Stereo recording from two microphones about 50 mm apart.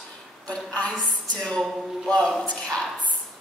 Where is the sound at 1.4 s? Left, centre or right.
Centre.